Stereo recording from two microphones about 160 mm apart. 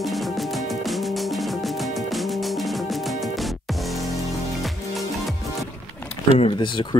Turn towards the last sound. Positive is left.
turn(degrees=30)  # may be behind; listen again after turning